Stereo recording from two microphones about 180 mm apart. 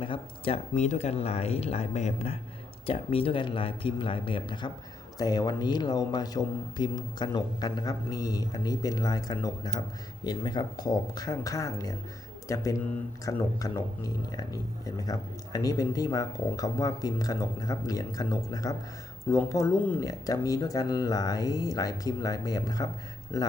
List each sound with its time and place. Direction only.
0.0 s a man's voice: 30° left (ahead or behind)